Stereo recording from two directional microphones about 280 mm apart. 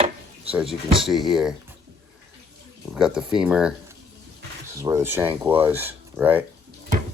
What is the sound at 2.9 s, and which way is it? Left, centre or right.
Speech, centre.